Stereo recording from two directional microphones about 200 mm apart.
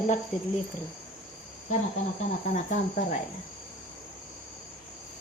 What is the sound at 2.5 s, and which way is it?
Speech, 40° left (ahead or behind).